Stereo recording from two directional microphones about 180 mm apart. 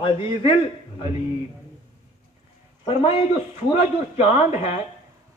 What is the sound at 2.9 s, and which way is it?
Speech, 30° left (ahead or behind).